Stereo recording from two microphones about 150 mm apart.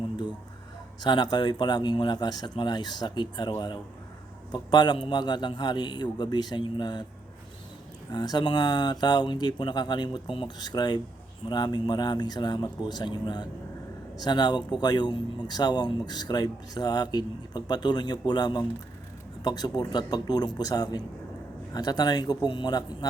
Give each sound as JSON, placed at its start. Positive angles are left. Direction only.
{"t": 1.0, "sound": "speech", "side_deg": 30}
{"t": 8.1, "sound": "speech", "side_deg": 25}